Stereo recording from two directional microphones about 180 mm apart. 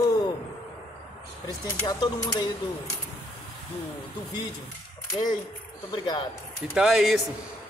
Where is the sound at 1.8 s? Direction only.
20° left (ahead or behind).